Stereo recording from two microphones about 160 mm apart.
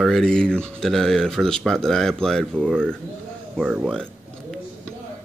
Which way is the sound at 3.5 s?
5° right (ahead or behind).